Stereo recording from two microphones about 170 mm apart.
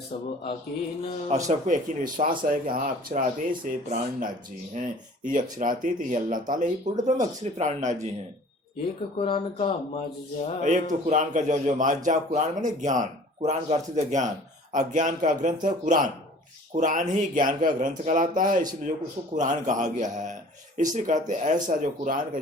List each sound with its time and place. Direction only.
1.5 s speech: 50° right (ahead or behind)
9.1 s speech: 35° left (ahead or behind)
10.6 s speech: 45° right (ahead or behind)